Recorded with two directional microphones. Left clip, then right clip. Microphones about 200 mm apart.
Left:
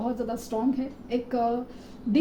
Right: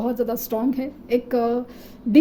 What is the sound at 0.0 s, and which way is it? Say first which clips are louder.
A woman's voice: right 6 dB; 55° right (ahead or behind).